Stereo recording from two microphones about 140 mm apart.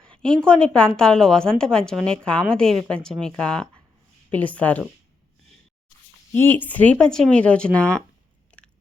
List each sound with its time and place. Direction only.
0.0 s a woman's voice: 5° left (ahead or behind)
6.3 s speech: 15° left (ahead or behind)
8.5 s biting: 10° left (ahead or behind)